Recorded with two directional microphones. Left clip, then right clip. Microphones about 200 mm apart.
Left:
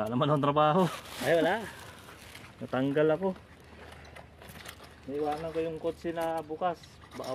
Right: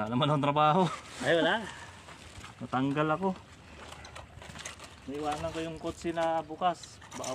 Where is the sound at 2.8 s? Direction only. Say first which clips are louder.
Left 4 dB; 55° right (ahead or behind).